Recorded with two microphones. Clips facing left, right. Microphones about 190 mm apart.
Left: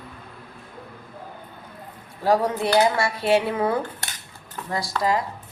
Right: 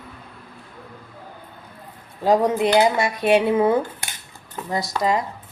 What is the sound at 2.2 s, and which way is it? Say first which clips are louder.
Speech: right 3 dB; 20° right (ahead or behind).